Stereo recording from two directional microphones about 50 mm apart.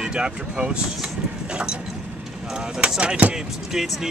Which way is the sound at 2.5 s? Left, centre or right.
Centre.